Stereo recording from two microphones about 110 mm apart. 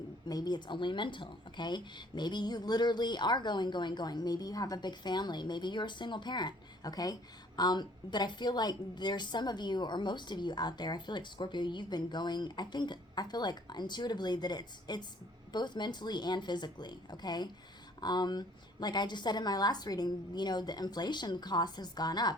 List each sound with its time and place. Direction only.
0.3 s speech: 40° left (ahead or behind)